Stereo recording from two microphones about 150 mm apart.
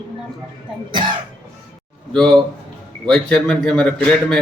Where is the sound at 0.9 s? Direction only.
35° right (ahead or behind).